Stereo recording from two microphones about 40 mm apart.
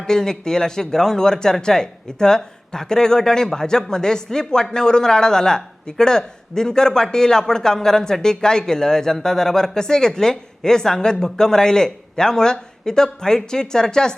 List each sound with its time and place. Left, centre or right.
0.0 s speech: centre